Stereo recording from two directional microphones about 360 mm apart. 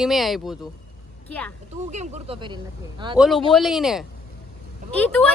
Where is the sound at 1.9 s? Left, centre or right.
Centre.